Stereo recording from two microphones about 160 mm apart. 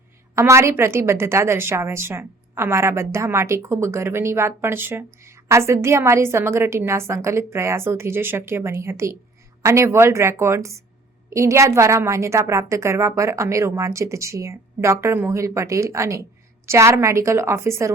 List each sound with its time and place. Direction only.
0.3 s a woman's voice: 15° right (ahead or behind)